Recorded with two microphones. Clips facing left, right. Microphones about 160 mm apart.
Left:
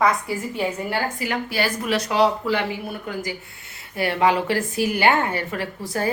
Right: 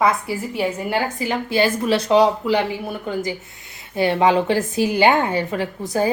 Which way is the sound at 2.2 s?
15° right (ahead or behind).